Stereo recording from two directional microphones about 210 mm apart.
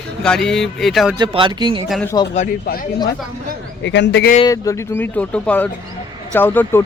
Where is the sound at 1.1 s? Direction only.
20° right (ahead or behind).